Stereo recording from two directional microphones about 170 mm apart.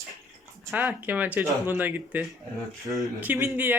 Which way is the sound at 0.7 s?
5° right (ahead or behind).